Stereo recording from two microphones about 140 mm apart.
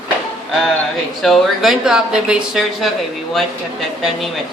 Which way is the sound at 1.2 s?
Centre (ahead or behind).